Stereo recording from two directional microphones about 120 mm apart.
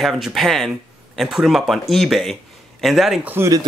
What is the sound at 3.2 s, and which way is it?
Speech, 20° right (ahead or behind).